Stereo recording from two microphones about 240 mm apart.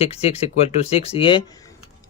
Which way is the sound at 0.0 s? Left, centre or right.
Left.